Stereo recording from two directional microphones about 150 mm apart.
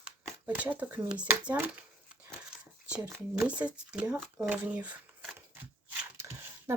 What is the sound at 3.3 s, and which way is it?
Speech, 10° right (ahead or behind).